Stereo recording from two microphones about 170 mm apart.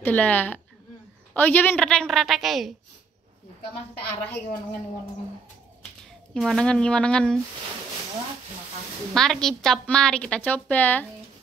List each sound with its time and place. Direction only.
0.0 s a woman's voice: 10° left (ahead or behind)
6.3 s a woman's voice: centre (ahead or behind)
9.1 s a woman's voice: 5° left (ahead or behind)